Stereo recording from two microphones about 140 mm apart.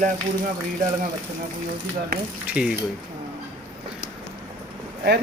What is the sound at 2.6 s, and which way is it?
Speech, 5° right (ahead or behind).